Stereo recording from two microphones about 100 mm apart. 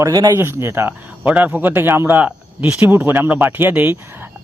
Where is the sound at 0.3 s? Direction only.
25° right (ahead or behind).